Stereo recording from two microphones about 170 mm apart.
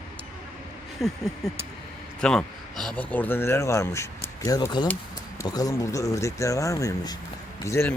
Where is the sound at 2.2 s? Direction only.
5° left (ahead or behind).